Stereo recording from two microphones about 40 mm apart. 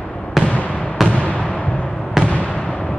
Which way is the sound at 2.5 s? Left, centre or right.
Left.